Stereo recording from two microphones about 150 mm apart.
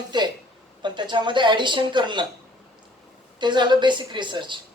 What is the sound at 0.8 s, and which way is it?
A woman's voice, 30° right (ahead or behind).